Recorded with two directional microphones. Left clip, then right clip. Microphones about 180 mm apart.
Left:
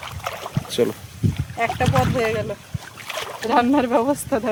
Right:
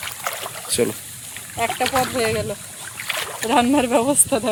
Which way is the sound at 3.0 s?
Centre (ahead or behind).